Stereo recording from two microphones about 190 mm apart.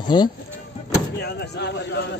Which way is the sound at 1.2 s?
60° left (ahead or behind).